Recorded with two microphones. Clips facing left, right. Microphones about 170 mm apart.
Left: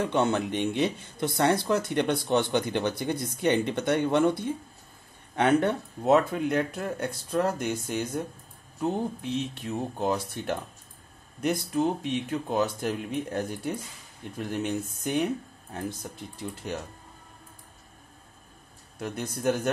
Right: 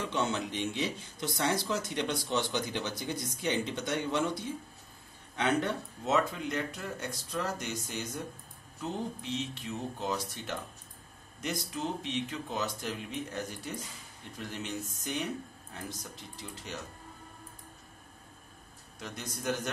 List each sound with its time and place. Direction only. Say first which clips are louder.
0.0 s speech: left 7 dB; 55° left (ahead or behind)
18.9 s speech: left 8 dB; 55° left (ahead or behind)